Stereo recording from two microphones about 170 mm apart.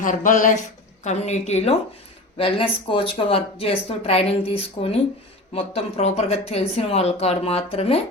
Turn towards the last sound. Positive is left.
turn(degrees=35)  # may be behind; listen again after turning